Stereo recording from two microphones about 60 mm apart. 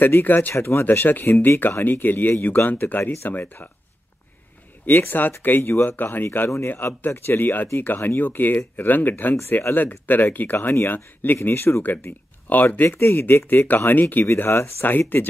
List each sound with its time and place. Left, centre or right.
0.0 s speech: left
3.3 s speech: left
4.8 s speech: left
9.4 s speech: left